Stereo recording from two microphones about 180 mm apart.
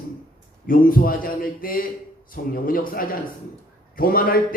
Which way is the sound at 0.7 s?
50° left (ahead or behind).